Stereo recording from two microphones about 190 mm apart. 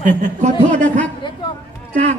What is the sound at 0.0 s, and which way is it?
Speech, 40° right (ahead or behind).